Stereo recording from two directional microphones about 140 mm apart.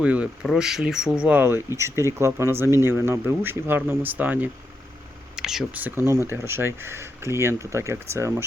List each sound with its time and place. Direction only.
0.0 s speech: 10° right (ahead or behind)